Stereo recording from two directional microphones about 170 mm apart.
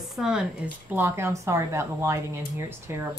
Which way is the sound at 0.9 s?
15° right (ahead or behind).